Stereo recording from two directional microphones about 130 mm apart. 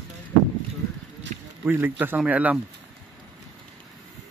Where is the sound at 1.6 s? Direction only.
15° right (ahead or behind).